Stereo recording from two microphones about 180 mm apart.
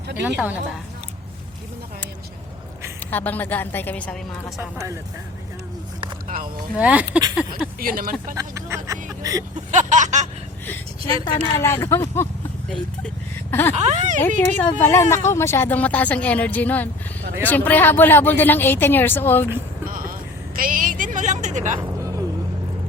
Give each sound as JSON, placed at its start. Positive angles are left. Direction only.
{"t": 0.2, "sound": "speech", "side_deg": -10}
{"t": 3.1, "sound": "speech", "side_deg": 10}
{"t": 6.2, "sound": "a sound", "side_deg": -50}
{"t": 6.7, "sound": "speech", "side_deg": -5}
{"t": 7.8, "sound": "a sound", "side_deg": -55}
{"t": 8.4, "sound": "speech", "side_deg": -15}
{"t": 9.6, "sound": "a sound", "side_deg": -40}
{"t": 11.0, "sound": "speech", "side_deg": 20}
{"t": 12.6, "sound": "speech", "side_deg": 5}
{"t": 13.7, "sound": "speech", "side_deg": -40}
{"t": 14.2, "sound": "speech", "side_deg": 10}
{"t": 19.9, "sound": "vehicle", "side_deg": -50}
{"t": 20.6, "sound": "a woman's voice", "side_deg": -50}
{"t": 21.8, "sound": "music", "side_deg": -20}